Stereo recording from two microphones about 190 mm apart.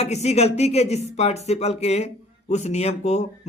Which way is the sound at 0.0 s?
35° left (ahead or behind).